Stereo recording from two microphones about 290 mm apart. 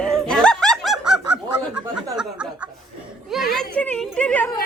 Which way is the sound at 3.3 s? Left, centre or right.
Centre.